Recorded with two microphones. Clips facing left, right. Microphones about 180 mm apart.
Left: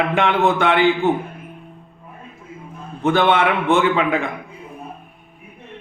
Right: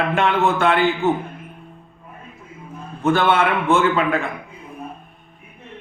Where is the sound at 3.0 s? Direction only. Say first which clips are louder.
Left 1 dB; 15° left (ahead or behind).